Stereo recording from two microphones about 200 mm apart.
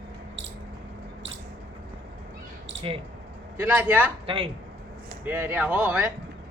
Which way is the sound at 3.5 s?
10° right (ahead or behind).